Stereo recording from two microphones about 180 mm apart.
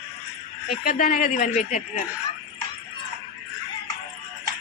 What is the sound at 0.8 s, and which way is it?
Speech, 50° left (ahead or behind).